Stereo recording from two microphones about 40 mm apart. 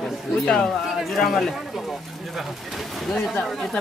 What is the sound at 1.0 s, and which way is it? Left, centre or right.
Speech, centre.